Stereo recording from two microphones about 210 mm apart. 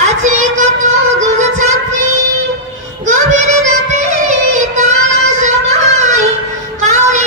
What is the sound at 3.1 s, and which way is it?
Child singing, 35° right (ahead or behind).